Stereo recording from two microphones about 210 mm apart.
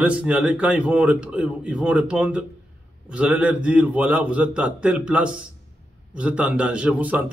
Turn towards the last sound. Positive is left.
turn(degrees=-5)  # may be behind; listen again after turning